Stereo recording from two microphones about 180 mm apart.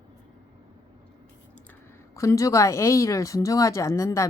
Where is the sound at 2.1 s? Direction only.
15° left (ahead or behind).